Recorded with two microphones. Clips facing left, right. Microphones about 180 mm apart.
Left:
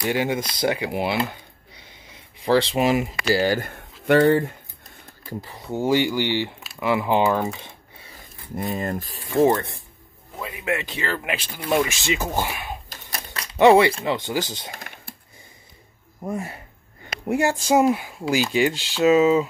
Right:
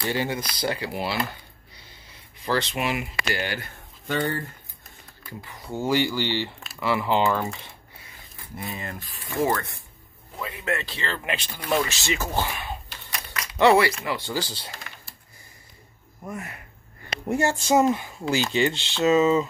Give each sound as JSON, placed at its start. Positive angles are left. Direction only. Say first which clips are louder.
{"t": 0.0, "sound": "speech", "louder": "left 4 dB", "side_deg": 15}
{"t": 0.4, "sound": "speech", "louder": "left 5 dB", "side_deg": 25}
{"t": 2.4, "sound": "speech", "louder": "left 7 dB", "side_deg": 30}
{"t": 3.6, "sound": "speech", "louder": "left 12 dB", "side_deg": 65}
{"t": 5.4, "sound": "speech", "louder": "left 3 dB", "side_deg": 35}
{"t": 5.7, "sound": "speech", "louder": "left 3 dB", "side_deg": 15}
{"t": 8.5, "sound": "speech", "louder": "left 8 dB", "side_deg": 45}
{"t": 9.4, "sound": "speech", "louder": "left 6 dB", "side_deg": 25}
{"t": 10.4, "sound": "speech", "louder": "left 2 dB", "side_deg": 10}
{"t": 12.9, "sound": "a sound", "louder": "left 1 dB", "side_deg": 35}
{"t": 13.6, "sound": "speech", "louder": "left 4 dB", "side_deg": 20}
{"t": 14.7, "sound": "a sound", "louder": "left 4 dB", "side_deg": 50}
{"t": 16.3, "sound": "speech", "louder": "left 6 dB", "side_deg": 30}
{"t": 17.3, "sound": "speech", "louder": "left 2 dB", "side_deg": 15}